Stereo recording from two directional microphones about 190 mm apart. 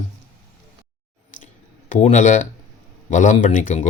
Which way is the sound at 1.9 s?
40° left (ahead or behind).